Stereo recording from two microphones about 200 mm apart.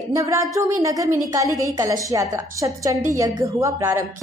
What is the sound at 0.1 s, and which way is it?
A woman's voice, 15° right (ahead or behind).